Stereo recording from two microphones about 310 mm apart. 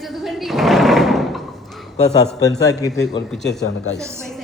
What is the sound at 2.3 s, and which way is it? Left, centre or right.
A man's voice, centre.